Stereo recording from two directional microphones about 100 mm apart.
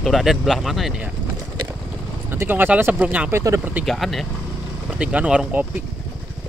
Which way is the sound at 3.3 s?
30° right (ahead or behind).